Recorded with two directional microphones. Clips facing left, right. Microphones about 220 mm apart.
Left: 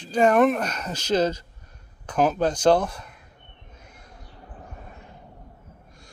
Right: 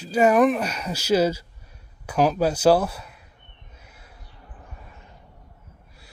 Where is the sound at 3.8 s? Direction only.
5° right (ahead or behind).